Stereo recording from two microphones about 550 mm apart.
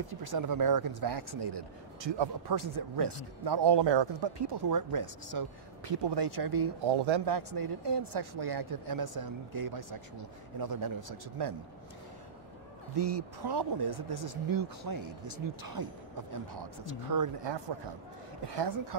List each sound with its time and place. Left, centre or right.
0.1 s speech: right
12.9 s speech: right
17.4 s speech: right